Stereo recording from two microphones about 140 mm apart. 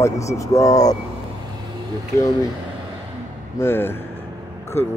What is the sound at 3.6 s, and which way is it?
Speech, 15° left (ahead or behind).